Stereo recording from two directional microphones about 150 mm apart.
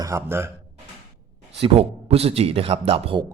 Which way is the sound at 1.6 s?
40° right (ahead or behind).